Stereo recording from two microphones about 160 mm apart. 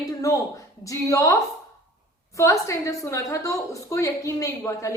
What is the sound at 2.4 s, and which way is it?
A woman's voice, 20° left (ahead or behind).